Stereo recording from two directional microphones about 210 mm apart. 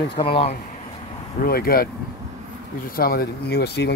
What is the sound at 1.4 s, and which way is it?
Speech, 45° left (ahead or behind).